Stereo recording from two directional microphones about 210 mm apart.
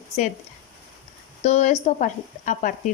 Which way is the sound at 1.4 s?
35° left (ahead or behind).